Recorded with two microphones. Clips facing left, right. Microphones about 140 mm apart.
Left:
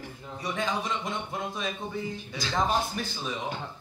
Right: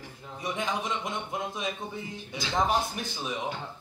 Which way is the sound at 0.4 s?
20° right (ahead or behind).